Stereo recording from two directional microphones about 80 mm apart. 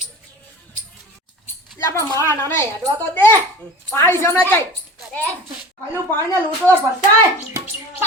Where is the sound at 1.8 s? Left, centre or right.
Left.